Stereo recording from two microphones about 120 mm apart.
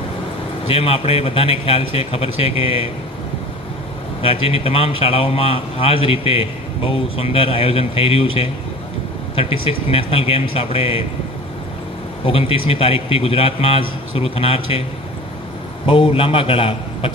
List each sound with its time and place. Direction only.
0.7 s a man's voice: 55° left (ahead or behind)
4.2 s a man's voice: 55° left (ahead or behind)
12.3 s a man's voice: 50° left (ahead or behind)